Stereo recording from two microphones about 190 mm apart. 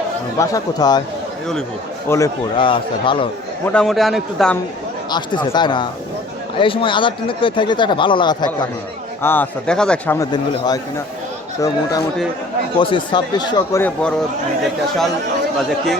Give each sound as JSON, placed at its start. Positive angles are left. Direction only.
{"t": 0.3, "sound": "speech", "side_deg": 20}
{"t": 2.0, "sound": "speech", "side_deg": 15}
{"t": 3.7, "sound": "a man's voice", "side_deg": 0}
{"t": 5.1, "sound": "speech", "side_deg": 25}
{"t": 9.2, "sound": "speech", "side_deg": 10}
{"t": 10.2, "sound": "speech", "side_deg": 20}
{"t": 13.8, "sound": "a man's voice", "side_deg": 5}